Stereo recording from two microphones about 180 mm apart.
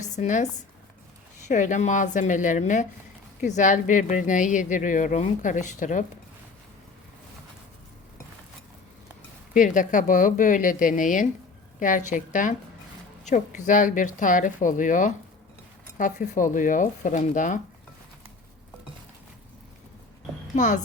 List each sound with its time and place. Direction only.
0.0 s speech: 45° left (ahead or behind)
1.5 s speech: 45° left (ahead or behind)
9.6 s speech: 45° left (ahead or behind)
20.6 s speech: 45° left (ahead or behind)